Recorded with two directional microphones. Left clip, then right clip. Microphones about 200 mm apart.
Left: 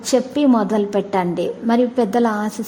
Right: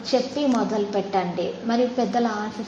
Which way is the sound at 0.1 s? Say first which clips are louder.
Left 6 dB; 50° left (ahead or behind).